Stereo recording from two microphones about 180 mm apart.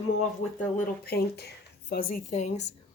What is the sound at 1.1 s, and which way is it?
Speech, 60° left (ahead or behind).